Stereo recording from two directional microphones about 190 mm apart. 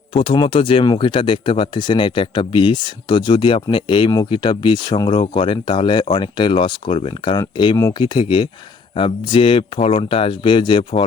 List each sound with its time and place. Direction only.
0.1 s speech: 25° left (ahead or behind)